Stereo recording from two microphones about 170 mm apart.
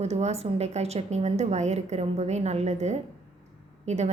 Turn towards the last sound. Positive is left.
turn(degrees=-40)  # may be behind; listen again after turning